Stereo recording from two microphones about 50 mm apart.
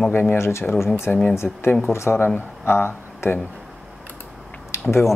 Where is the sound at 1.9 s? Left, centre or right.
Left.